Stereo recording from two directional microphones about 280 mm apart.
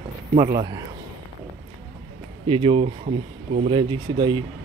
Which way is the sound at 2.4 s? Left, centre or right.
Centre.